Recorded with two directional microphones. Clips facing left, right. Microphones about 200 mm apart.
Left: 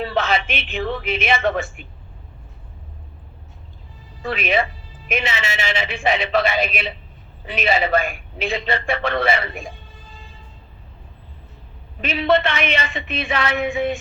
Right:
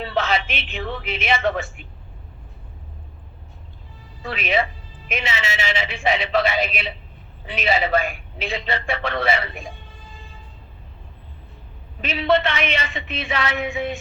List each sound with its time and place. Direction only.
0.0 s a woman's voice: 50° left (ahead or behind)
4.3 s a man's voice: 55° left (ahead or behind)
12.0 s a man's voice: 50° left (ahead or behind)